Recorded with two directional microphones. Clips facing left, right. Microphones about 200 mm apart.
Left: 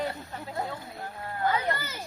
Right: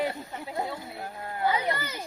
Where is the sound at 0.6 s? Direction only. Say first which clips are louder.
Right 1 dB; 10° right (ahead or behind).